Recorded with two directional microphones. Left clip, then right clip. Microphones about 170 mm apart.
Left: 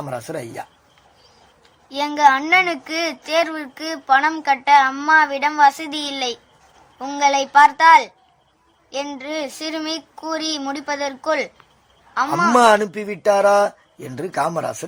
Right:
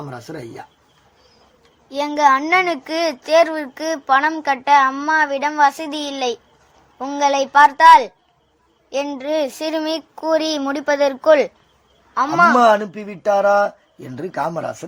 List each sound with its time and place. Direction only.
0.1 s speech: 30° left (ahead or behind)
1.9 s a child's voice: 20° right (ahead or behind); by 11.5 s 50° right (ahead or behind)
12.5 s speech: 10° left (ahead or behind)